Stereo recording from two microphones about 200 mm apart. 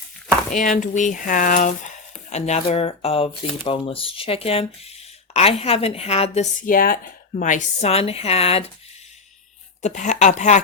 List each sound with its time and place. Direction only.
0.5 s a woman's voice: 40° left (ahead or behind)
9.8 s a woman's voice: 35° left (ahead or behind)